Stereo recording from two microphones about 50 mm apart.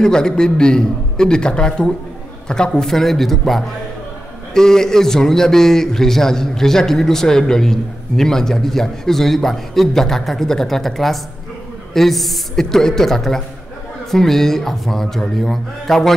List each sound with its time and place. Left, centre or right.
0.0 s a man's voice: centre